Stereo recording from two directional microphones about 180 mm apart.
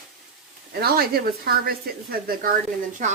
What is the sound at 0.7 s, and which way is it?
Speech, 60° right (ahead or behind).